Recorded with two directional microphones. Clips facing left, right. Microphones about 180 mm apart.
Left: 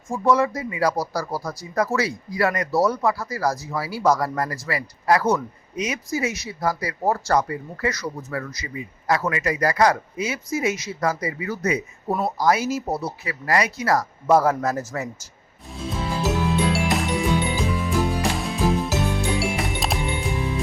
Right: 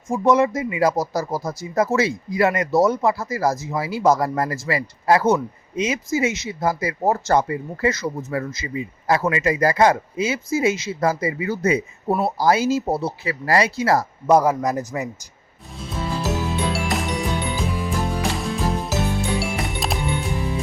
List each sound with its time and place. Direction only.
0.1 s speech: 20° right (ahead or behind)
15.7 s music: centre (ahead or behind)